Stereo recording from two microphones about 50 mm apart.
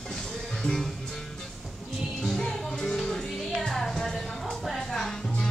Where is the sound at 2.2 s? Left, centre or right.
Centre.